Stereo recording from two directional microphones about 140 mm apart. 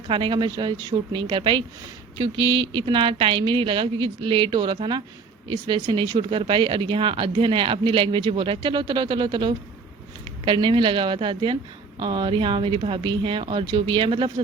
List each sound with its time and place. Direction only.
0.1 s speech: 35° right (ahead or behind)